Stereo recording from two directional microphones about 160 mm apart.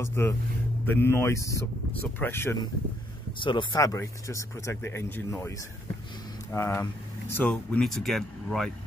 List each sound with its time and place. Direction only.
0.0 s speech: 15° left (ahead or behind)
3.3 s speech: 30° left (ahead or behind)
3.7 s speech: 20° left (ahead or behind)
6.5 s speech: 15° left (ahead or behind)